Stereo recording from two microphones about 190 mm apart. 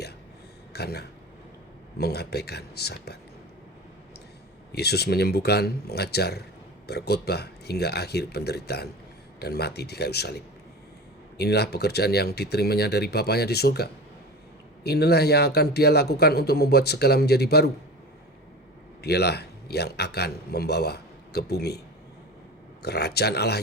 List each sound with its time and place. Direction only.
0.7 s a man's voice: 60° left (ahead or behind)
4.7 s a man's voice: 60° left (ahead or behind)
19.0 s a man's voice: 60° left (ahead or behind)
22.8 s a man's voice: 60° left (ahead or behind)